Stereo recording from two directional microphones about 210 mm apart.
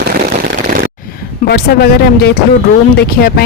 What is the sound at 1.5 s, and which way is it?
Speech, 50° left (ahead or behind).